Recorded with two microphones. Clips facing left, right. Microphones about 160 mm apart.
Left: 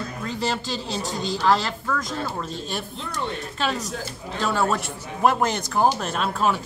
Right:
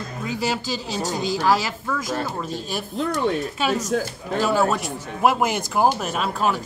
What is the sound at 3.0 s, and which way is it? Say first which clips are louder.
Speech: right 12 dB; 50° right (ahead or behind).